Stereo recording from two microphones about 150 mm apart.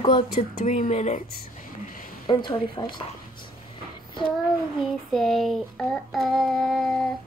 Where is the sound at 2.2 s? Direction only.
35° left (ahead or behind).